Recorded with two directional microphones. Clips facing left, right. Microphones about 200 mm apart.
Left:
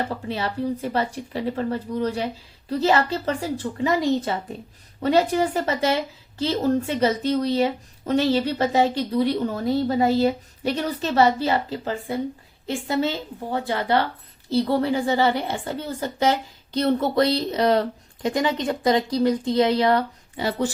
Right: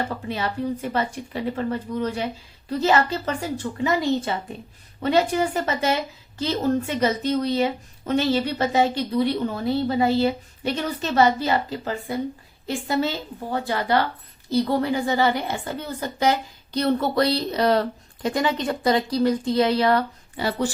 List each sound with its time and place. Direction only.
0.1 s a woman's voice: 35° left (ahead or behind)